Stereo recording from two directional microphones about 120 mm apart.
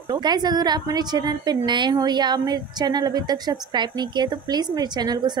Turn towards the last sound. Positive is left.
turn(degrees=-35)  # may be behind; listen again after turning